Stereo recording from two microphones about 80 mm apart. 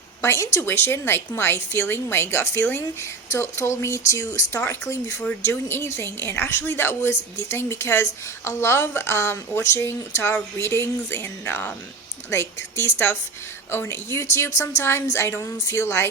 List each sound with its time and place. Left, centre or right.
0.2 s a woman's voice: left